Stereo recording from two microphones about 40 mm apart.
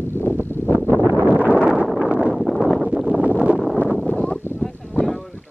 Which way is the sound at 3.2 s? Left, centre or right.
Right.